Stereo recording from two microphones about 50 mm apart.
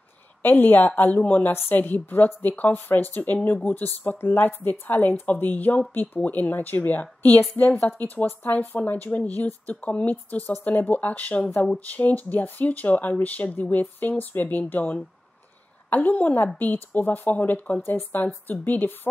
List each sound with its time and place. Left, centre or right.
0.4 s speech: left
1.4 s speech: left
1.8 s speech: left
17.8 s speech: left